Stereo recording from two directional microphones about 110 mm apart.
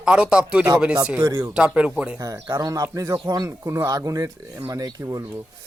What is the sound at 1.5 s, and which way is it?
Speech, 10° right (ahead or behind).